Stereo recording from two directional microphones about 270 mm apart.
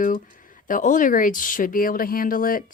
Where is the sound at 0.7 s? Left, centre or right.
Left.